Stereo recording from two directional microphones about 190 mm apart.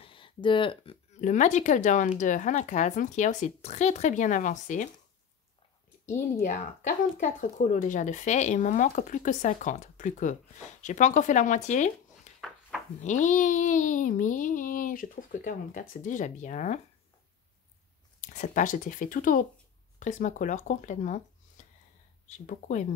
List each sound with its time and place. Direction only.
0.0 s a sound: 25° left (ahead or behind)
1.2 s speech: 40° left (ahead or behind)
7.2 s speech: 40° left (ahead or behind)
12.3 s a sound: 35° left (ahead or behind)
13.0 s speech: 40° left (ahead or behind)
18.2 s speech: 40° left (ahead or behind)